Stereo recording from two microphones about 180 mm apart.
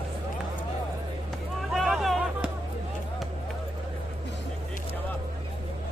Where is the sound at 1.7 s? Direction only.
Centre (ahead or behind).